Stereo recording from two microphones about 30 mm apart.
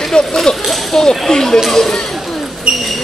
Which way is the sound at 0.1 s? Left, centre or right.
Centre.